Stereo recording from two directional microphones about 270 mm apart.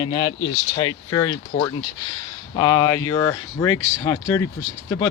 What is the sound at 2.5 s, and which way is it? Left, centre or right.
Speech, centre.